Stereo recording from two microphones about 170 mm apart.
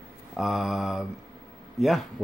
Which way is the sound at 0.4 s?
Centre (ahead or behind).